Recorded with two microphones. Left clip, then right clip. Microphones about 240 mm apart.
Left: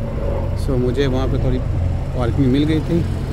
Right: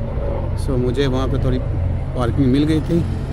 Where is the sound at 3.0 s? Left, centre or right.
Left.